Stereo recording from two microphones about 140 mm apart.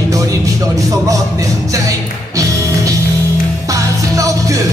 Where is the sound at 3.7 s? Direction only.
25° right (ahead or behind).